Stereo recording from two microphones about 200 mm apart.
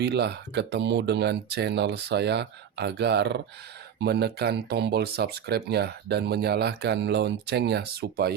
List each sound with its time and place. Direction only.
0.0 s speech: 55° right (ahead or behind)